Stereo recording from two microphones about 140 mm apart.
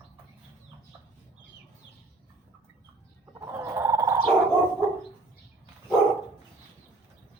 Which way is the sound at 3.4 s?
20° right (ahead or behind).